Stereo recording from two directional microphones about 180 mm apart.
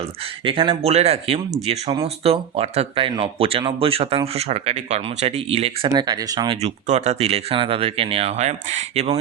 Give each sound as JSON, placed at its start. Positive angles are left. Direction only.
{"t": 0.4, "sound": "speech", "side_deg": -30}
{"t": 6.6, "sound": "speech", "side_deg": -40}